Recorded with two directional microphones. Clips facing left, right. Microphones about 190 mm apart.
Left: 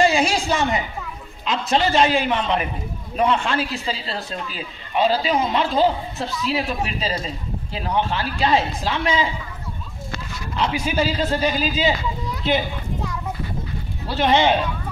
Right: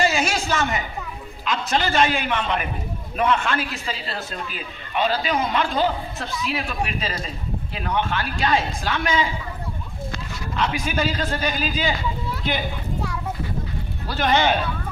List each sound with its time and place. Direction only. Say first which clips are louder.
0.0 s a sound: left 4 dB; 30° left (ahead or behind)
0.5 s a man's voice: left 2 dB; 35° left (ahead or behind)
10.8 s a man's voice: left 3 dB; 30° left (ahead or behind)
14.0 s a man's voice: left 3 dB; 25° left (ahead or behind)